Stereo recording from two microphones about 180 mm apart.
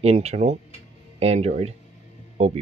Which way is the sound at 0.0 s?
35° right (ahead or behind).